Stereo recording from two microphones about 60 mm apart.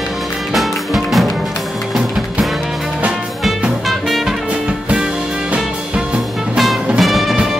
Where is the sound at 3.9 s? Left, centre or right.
Centre.